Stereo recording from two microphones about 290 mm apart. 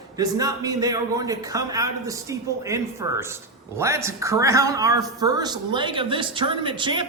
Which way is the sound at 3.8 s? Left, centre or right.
Centre.